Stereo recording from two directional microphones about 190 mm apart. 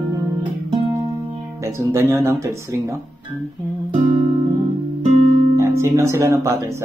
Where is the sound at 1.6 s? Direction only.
15° right (ahead or behind).